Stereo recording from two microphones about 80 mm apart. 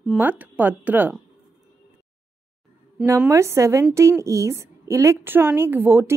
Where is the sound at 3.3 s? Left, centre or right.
Right.